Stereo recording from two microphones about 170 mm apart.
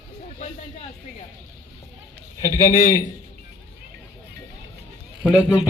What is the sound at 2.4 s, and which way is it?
Speech, 20° left (ahead or behind).